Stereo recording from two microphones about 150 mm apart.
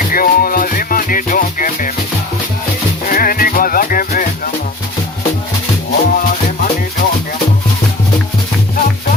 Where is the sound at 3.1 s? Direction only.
70° left (ahead or behind).